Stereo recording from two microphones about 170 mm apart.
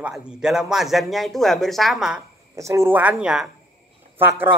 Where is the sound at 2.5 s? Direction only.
15° right (ahead or behind).